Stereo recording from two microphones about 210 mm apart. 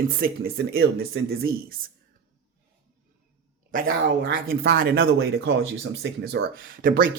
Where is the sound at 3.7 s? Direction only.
45° right (ahead or behind).